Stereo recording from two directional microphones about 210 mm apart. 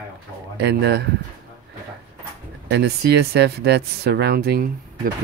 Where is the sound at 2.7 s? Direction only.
50° right (ahead or behind).